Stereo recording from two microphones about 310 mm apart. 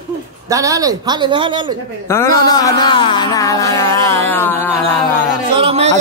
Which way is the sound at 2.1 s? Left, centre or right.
Centre.